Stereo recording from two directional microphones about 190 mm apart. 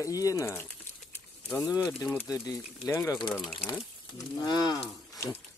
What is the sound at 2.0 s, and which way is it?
Speech, 10° left (ahead or behind).